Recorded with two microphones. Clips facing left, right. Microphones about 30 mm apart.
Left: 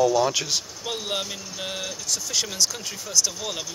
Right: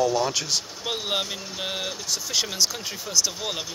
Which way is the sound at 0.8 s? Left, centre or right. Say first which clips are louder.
Right 3 dB; centre.